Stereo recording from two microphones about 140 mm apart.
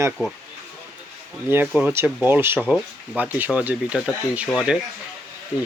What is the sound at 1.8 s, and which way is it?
Speech, 15° right (ahead or behind).